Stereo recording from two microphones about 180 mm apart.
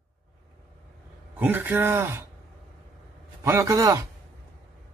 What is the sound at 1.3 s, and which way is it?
Speech, 10° right (ahead or behind).